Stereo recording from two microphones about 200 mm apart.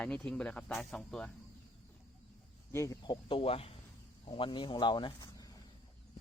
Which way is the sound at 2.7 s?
15° left (ahead or behind).